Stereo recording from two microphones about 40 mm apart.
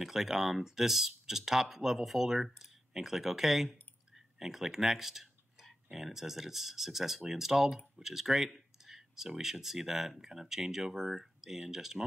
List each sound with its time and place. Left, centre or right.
0.0 s speech: centre
8.5 s a sound: centre
9.4 s speech: centre